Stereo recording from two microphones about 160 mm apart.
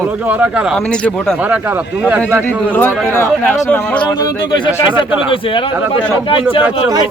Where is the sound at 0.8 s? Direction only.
5° left (ahead or behind).